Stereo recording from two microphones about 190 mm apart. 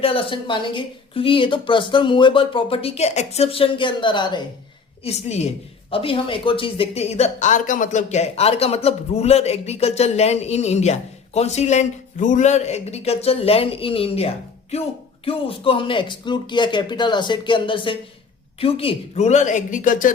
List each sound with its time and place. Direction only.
0.0 s a woman's voice: 30° left (ahead or behind)
5.0 s a woman's voice: 35° left (ahead or behind)